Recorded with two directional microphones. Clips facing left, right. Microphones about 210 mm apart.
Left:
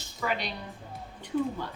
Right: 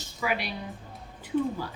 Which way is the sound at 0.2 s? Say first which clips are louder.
Right 1 dB; 10° right (ahead or behind).